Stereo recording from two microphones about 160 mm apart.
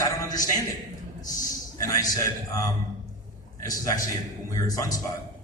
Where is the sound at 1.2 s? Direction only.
20° left (ahead or behind).